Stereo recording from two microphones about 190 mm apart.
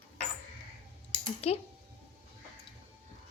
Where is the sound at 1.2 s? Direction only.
30° left (ahead or behind).